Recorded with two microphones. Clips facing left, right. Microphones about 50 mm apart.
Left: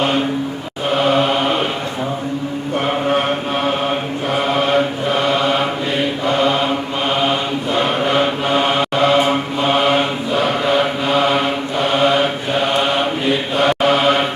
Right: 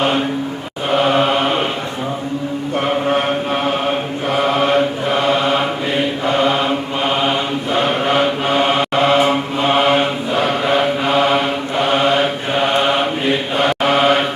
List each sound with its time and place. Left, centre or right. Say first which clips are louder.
1.0 s chant: even; centre
4.7 s mantra: right 1 dB; centre
7.7 s mantra: right 1 dB; centre
12.6 s mantra: right 2 dB; right
13.8 s mantra: right 2 dB; centre